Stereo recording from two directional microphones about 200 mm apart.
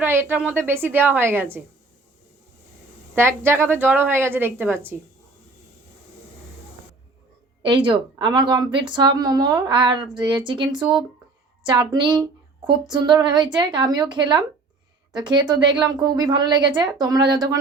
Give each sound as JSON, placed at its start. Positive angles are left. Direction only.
{"t": 0.0, "sound": "a woman's voice", "side_deg": -10}
{"t": 3.2, "sound": "a woman's voice", "side_deg": -10}
{"t": 7.6, "sound": "a woman's voice", "side_deg": -25}